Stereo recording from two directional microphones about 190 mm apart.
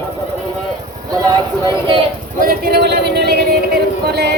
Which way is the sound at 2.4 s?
50° right (ahead or behind).